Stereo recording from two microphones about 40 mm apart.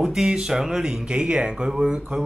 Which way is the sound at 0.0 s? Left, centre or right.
Centre.